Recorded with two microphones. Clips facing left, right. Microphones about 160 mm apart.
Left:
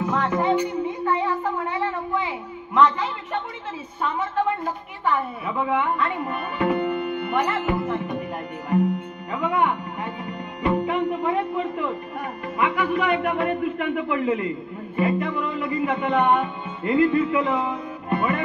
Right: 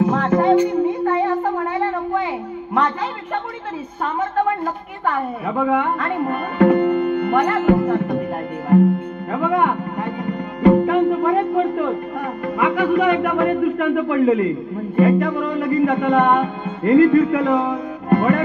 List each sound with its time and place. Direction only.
0.0 s music: 45° right (ahead or behind)
1.0 s a sound: 50° right (ahead or behind)
5.0 s speech: 45° right (ahead or behind)
9.3 s music: 45° right (ahead or behind)
12.5 s a man's voice: 45° right (ahead or behind)
15.0 s music: 45° right (ahead or behind)